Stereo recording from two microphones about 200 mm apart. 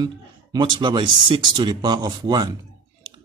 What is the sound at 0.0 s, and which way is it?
Speech, 20° right (ahead or behind).